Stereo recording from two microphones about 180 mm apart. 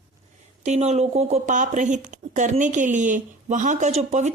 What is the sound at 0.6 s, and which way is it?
Speech, 40° right (ahead or behind).